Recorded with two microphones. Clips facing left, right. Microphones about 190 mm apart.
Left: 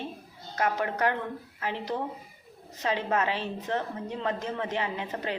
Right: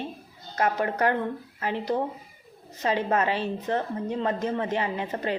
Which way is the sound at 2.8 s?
50° right (ahead or behind).